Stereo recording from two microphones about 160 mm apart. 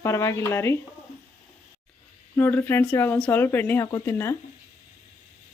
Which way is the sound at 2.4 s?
15° left (ahead or behind).